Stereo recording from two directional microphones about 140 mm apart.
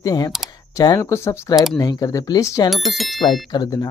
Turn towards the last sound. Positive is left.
turn(degrees=30)  # may be behind; listen again after turning